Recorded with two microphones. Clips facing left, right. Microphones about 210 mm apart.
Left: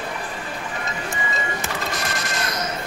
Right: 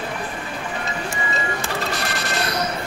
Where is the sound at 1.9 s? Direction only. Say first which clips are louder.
Right 2 dB; 30° right (ahead or behind).